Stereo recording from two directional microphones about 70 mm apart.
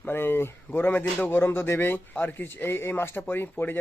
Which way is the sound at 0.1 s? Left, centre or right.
Left.